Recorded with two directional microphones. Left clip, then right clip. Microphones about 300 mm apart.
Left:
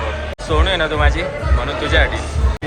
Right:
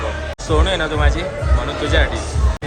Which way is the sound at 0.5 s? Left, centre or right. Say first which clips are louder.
Left 1 dB; centre.